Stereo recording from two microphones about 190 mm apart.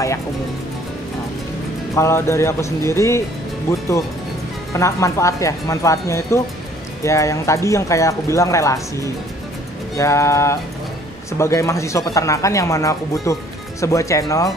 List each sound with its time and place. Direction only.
2.0 s speech: 15° left (ahead or behind)
4.7 s speech: 15° left (ahead or behind)
9.9 s speech: 15° left (ahead or behind)